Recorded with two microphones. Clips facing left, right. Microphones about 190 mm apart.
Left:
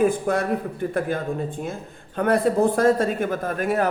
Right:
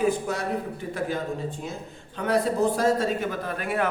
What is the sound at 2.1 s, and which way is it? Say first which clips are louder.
A woman's voice: left 4 dB; 55° left (ahead or behind).